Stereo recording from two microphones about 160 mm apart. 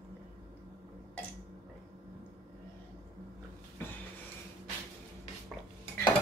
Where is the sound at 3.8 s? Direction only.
10° left (ahead or behind).